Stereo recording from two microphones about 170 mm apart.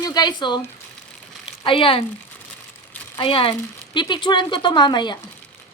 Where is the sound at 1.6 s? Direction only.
30° left (ahead or behind).